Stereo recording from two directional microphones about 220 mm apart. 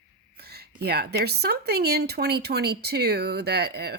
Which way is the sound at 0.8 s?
45° right (ahead or behind).